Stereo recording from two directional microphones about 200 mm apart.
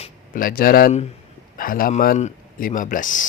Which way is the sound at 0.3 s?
45° left (ahead or behind).